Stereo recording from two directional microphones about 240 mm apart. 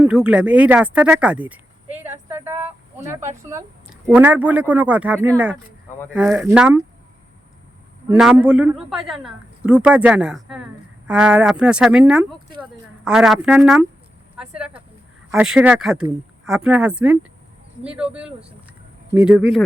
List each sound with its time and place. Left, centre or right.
0.0 s a man's voice: centre
8.0 s a man's voice: centre
14.3 s a sound: centre
15.3 s a man's voice: centre